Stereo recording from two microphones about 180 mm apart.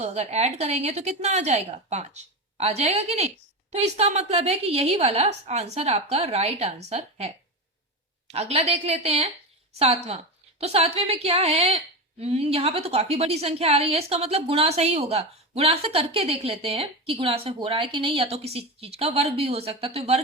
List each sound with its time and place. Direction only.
0.0 s a woman's voice: 35° right (ahead or behind)